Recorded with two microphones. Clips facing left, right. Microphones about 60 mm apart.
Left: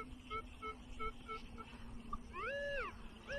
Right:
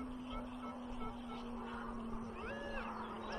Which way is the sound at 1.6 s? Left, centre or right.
Right.